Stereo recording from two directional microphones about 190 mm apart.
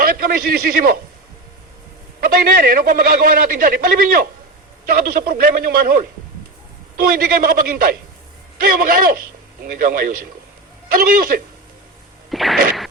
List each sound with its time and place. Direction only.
0.0 s a man's voice: 50° right (ahead or behind)
2.2 s a man's voice: 50° right (ahead or behind)
12.3 s a sound: centre (ahead or behind)